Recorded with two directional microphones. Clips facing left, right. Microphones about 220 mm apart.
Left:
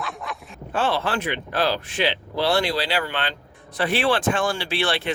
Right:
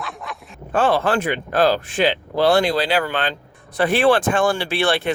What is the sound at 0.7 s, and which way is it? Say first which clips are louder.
Speech: right 6 dB; 50° right (ahead or behind).